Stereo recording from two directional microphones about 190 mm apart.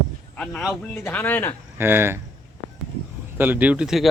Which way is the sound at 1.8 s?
10° right (ahead or behind).